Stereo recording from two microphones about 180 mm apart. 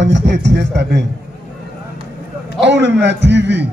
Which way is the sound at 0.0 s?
75° right (ahead or behind).